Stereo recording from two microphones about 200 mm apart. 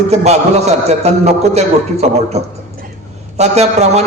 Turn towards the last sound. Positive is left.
turn(degrees=-35)  # may be behind; listen again after turning